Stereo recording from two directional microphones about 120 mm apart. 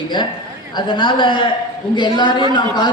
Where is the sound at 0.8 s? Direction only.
40° left (ahead or behind).